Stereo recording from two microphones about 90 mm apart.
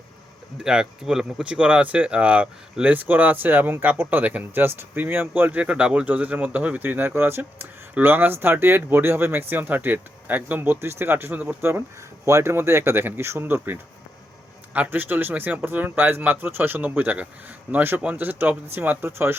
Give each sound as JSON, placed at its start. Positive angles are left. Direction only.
{"t": 0.6, "sound": "speech", "side_deg": -5}